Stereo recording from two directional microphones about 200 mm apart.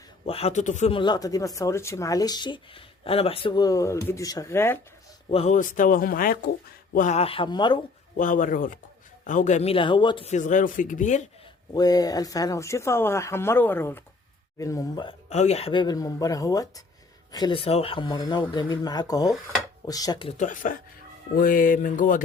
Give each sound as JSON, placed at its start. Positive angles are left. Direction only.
{"t": 0.3, "sound": "speech", "side_deg": 30}
{"t": 5.3, "sound": "speech", "side_deg": 35}
{"t": 8.1, "sound": "speech", "side_deg": 40}
{"t": 11.7, "sound": "speech", "side_deg": 20}
{"t": 15.3, "sound": "speech", "side_deg": 35}
{"t": 20.4, "sound": "speech", "side_deg": 40}